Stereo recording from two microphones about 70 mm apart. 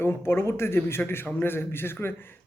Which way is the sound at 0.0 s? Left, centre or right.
Left.